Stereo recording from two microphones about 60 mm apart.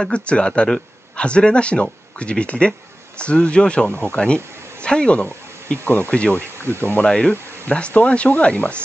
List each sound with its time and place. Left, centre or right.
0.0 s speech: centre
5.2 s speech: left
6.7 s speech: left
7.1 s speech: centre